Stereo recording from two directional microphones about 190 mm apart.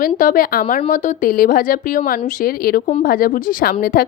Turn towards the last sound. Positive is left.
turn(degrees=50)  # may be behind; listen again after turning